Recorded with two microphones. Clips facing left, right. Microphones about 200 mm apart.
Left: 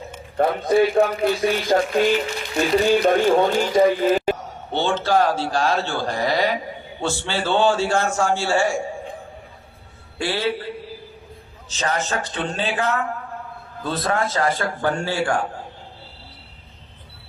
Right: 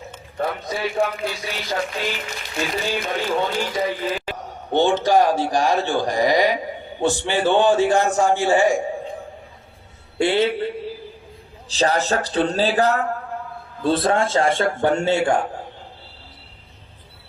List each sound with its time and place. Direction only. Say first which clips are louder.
0.3 s speech: left 9 dB; 55° left (ahead or behind)
4.7 s a man's voice: right 3 dB; 15° right (ahead or behind)
10.2 s a man's voice: right 5 dB; 20° right (ahead or behind)
11.7 s a man's voice: right 5 dB; 35° right (ahead or behind)